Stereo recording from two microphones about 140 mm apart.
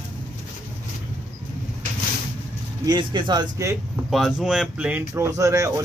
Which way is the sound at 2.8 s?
30° right (ahead or behind).